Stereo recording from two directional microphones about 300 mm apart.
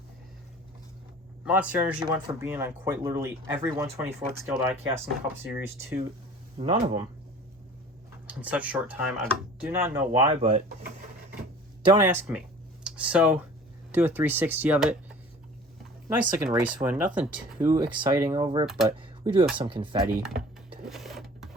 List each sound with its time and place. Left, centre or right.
1.5 s speech: centre
8.3 s speech: centre
11.9 s speech: centre
16.4 s speech: centre
18.6 s speech: centre
18.9 s a sound: centre
19.5 s speech: centre
20.8 s sewing machine: centre